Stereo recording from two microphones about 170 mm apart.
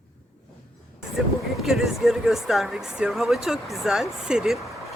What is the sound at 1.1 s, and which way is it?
Speech, centre (ahead or behind).